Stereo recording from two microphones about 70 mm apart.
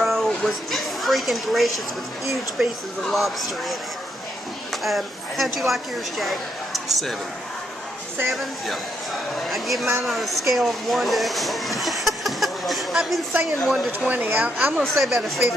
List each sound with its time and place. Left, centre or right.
0.0 s a sound: centre
2.2 s a woman's voice: centre
4.8 s a woman's voice: centre
8.3 s a woman's voice: centre
13.9 s speech: right
14.8 s a woman's voice: centre